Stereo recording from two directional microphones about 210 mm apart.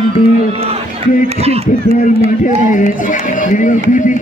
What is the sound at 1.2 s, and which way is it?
Speech, 30° right (ahead or behind).